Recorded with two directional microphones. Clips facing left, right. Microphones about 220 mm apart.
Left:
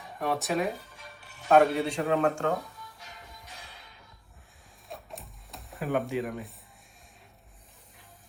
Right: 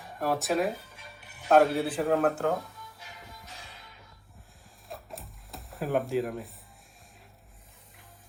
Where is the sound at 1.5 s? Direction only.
Centre (ahead or behind).